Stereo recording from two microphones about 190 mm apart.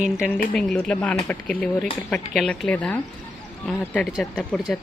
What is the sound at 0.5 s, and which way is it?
Speech, 5° left (ahead or behind).